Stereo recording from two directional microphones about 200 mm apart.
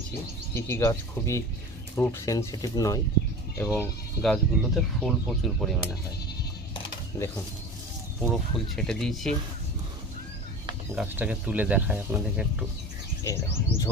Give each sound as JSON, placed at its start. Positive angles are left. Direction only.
{"t": 0.5, "sound": "speech", "side_deg": 15}
{"t": 3.8, "sound": "speech", "side_deg": 0}
{"t": 8.2, "sound": "speech", "side_deg": 0}
{"t": 10.9, "sound": "speech", "side_deg": -5}
{"t": 13.2, "sound": "speech", "side_deg": 15}